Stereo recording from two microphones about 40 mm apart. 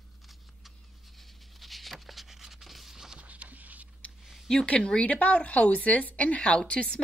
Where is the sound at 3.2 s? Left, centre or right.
Right.